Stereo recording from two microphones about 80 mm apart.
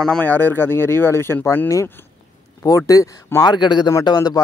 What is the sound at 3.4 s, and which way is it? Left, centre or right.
Speech, left.